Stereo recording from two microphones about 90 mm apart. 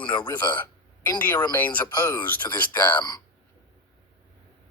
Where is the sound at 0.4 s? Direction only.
20° left (ahead or behind).